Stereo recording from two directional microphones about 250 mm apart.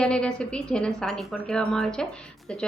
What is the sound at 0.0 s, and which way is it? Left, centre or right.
Speech, centre.